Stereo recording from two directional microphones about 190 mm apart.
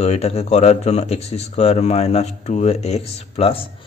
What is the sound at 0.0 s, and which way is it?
Speech, 35° left (ahead or behind).